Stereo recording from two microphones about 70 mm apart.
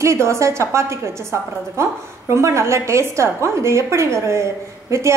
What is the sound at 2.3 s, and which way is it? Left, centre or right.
A woman's voice, right.